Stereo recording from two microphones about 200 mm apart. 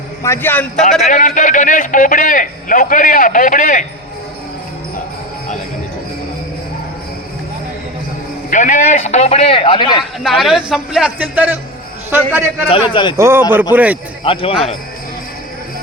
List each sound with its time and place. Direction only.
0.2 s a man's voice: 10° left (ahead or behind)
1.0 s a man's voice: 35° left (ahead or behind)
8.4 s a man's voice: 40° left (ahead or behind); by 10.0 s 25° left (ahead or behind)
10.2 s a man's voice: centre (ahead or behind)
12.9 s speech: 25° left (ahead or behind)
13.1 s a man's voice: 15° right (ahead or behind)
14.3 s speech: 25° left (ahead or behind)